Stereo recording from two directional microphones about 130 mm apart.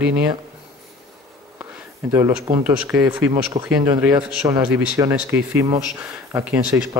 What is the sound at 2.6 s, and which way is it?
Speech, 10° right (ahead or behind).